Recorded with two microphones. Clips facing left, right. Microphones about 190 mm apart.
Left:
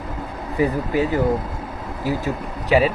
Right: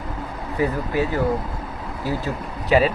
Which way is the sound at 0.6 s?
15° left (ahead or behind).